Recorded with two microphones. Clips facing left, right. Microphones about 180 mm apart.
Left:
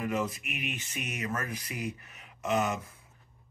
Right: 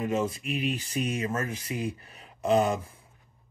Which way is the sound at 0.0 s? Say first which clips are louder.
Right 4 dB; 25° right (ahead or behind).